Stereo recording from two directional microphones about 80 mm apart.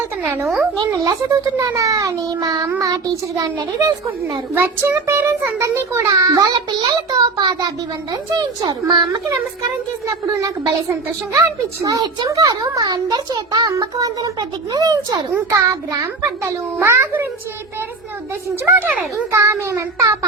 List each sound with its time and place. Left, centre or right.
1.2 s a child's voice: right
4.5 s a child's voice: right
6.5 s child singing: right
10.2 s a child's voice: right
12.3 s a child's voice: right
16.8 s a child's voice: right
18.6 s speech: right
19.3 s a child's voice: right